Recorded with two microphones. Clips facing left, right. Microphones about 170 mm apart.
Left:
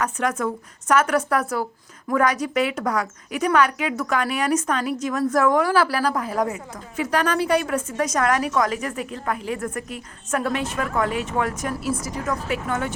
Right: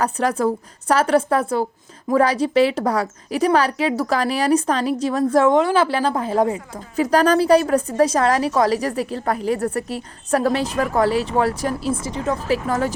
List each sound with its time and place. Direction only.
0.0 s a woman's voice: 35° right (ahead or behind)